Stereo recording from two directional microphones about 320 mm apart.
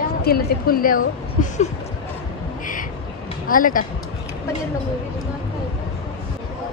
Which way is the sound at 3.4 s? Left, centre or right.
Left.